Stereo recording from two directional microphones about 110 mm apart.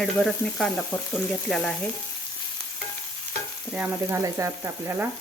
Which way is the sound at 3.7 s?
15° right (ahead or behind).